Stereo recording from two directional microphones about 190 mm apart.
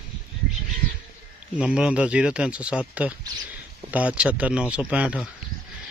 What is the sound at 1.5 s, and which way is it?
Speech, 5° right (ahead or behind).